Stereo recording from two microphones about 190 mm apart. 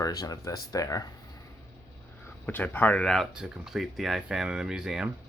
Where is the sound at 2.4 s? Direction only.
10° left (ahead or behind).